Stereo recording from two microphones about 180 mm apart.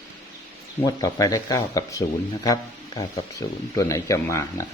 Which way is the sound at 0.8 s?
20° left (ahead or behind).